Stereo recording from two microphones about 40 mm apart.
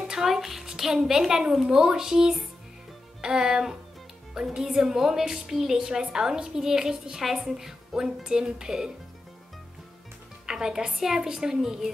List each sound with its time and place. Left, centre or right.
0.0 s a sound: centre
0.7 s a woman's voice: centre
10.4 s a woman's voice: centre